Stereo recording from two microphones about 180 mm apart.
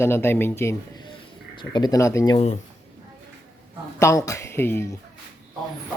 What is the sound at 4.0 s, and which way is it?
Speech, 15° left (ahead or behind).